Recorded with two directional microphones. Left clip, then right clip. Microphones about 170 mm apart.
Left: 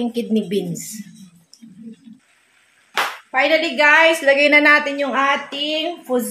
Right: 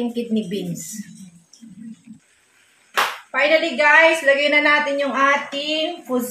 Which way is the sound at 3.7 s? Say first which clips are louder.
Left 1 dB; 55° left (ahead or behind).